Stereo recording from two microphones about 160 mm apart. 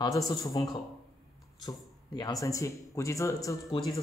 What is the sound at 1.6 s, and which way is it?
Speech, 25° left (ahead or behind).